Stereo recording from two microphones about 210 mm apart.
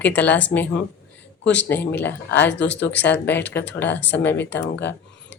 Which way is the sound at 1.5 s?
10° left (ahead or behind).